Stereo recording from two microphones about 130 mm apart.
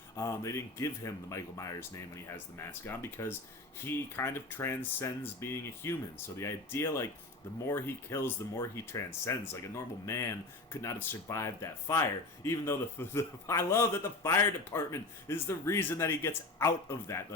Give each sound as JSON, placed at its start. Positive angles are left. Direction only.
{"t": 0.2, "sound": "speech", "side_deg": 20}